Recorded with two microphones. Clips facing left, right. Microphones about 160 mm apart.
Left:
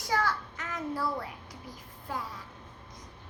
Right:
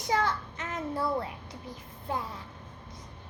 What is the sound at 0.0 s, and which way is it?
Child singing, 20° right (ahead or behind).